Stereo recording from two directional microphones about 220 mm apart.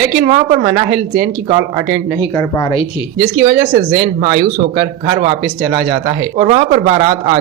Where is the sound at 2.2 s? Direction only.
15° left (ahead or behind).